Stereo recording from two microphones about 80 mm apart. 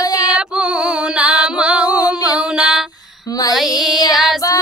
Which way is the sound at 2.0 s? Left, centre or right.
Left.